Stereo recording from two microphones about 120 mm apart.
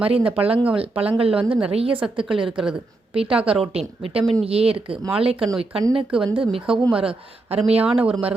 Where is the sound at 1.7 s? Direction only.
50° right (ahead or behind).